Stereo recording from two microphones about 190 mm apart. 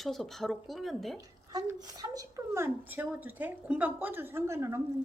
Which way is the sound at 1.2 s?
20° right (ahead or behind).